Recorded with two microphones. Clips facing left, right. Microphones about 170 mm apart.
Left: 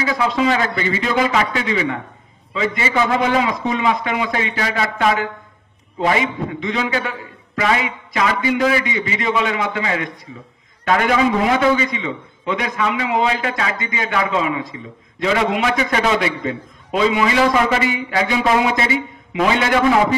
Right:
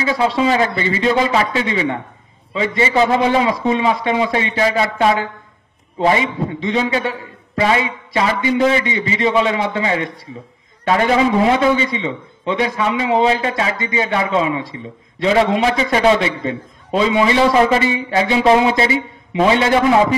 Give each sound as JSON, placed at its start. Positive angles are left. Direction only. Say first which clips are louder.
{"t": 0.0, "sound": "a man's voice", "louder": "right 2 dB", "side_deg": -30}